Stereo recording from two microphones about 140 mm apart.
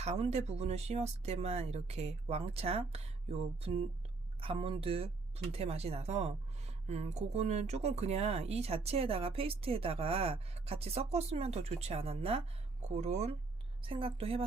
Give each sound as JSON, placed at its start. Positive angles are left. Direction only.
{"t": 0.0, "sound": "speech", "side_deg": -50}
{"t": 13.8, "sound": "a woman's voice", "side_deg": -40}